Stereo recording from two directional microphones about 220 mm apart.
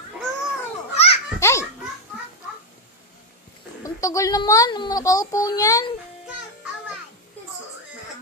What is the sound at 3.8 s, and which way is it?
A child's voice, 15° left (ahead or behind).